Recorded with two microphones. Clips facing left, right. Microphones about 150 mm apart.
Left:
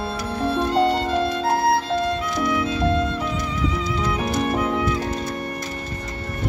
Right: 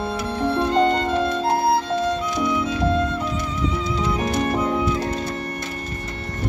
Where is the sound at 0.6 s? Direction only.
5° left (ahead or behind).